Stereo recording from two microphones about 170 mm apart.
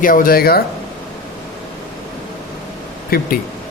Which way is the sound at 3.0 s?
60° left (ahead or behind).